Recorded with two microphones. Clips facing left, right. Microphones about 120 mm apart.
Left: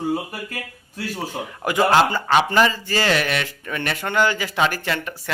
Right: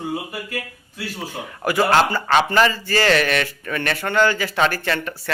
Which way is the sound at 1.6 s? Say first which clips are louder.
Even; 20° left (ahead or behind).